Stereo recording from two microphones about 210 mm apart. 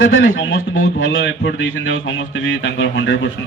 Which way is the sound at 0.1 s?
70° left (ahead or behind).